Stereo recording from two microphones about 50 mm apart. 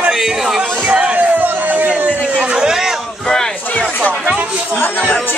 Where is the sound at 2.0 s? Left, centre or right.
Right.